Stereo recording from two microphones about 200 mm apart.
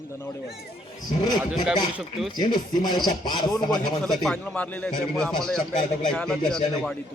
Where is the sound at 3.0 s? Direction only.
20° left (ahead or behind).